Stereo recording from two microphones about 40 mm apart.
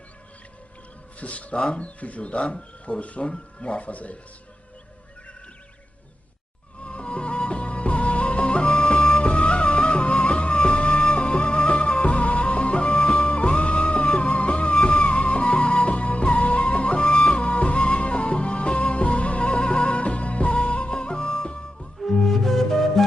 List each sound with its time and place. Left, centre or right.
1.2 s speech: left
6.8 s music: left
22.0 s music: centre